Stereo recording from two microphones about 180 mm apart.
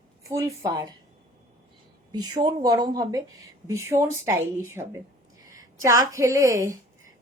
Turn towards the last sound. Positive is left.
turn(degrees=-15)  # may be behind; listen again after turning